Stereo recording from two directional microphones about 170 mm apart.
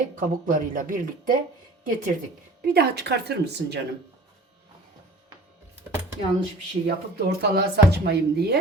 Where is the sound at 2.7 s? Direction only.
70° right (ahead or behind).